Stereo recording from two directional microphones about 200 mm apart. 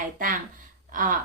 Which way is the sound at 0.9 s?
40° right (ahead or behind).